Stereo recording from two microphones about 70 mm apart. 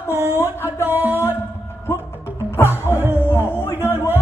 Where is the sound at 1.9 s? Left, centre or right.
Left.